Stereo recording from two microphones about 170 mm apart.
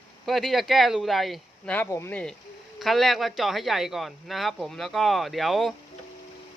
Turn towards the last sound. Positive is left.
turn(degrees=0)  # may be behind; listen again after turning